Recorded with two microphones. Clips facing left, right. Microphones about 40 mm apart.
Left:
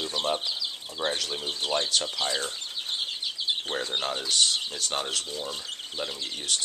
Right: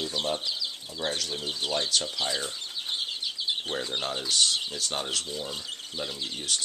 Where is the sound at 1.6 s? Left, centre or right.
Centre.